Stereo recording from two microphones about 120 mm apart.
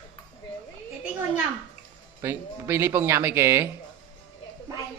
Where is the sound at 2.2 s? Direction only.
20° right (ahead or behind).